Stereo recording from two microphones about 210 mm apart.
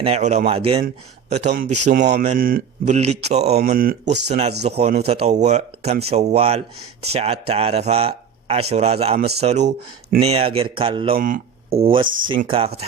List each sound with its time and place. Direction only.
0.0 s a man's voice: 30° right (ahead or behind)